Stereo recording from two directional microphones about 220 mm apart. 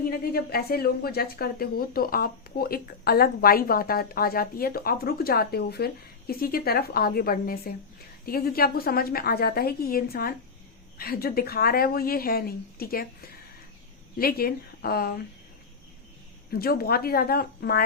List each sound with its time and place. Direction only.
0.0 s a woman's voice: 45° left (ahead or behind)
16.5 s a woman's voice: 45° left (ahead or behind)